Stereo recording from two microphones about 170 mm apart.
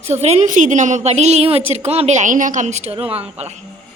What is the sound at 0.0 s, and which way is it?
A woman's voice, 40° right (ahead or behind).